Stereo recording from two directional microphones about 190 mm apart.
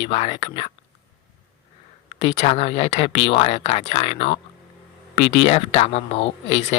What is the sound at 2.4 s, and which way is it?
Speech, 35° left (ahead or behind).